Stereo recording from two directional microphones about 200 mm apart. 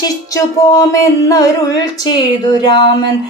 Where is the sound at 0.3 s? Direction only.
20° left (ahead or behind).